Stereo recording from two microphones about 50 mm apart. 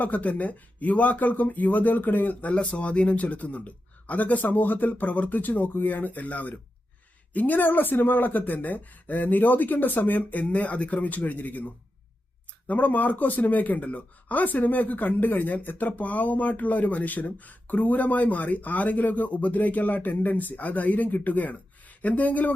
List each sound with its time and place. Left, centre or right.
0.0 s speech: left